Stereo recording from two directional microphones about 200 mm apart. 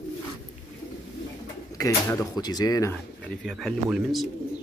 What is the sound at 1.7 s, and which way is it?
Speech, 15° left (ahead or behind).